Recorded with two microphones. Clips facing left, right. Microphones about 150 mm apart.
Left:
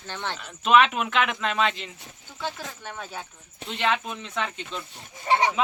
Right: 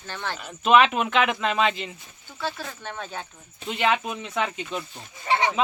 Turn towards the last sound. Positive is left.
turn(degrees=40)  # may be behind; listen again after turning